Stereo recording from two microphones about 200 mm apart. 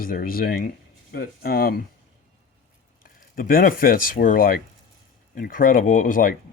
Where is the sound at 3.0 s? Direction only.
45° left (ahead or behind).